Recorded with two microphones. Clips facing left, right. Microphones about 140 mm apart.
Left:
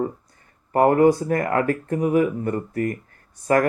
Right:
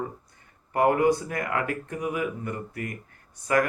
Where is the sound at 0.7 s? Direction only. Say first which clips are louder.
Left 6 dB; 40° left (ahead or behind).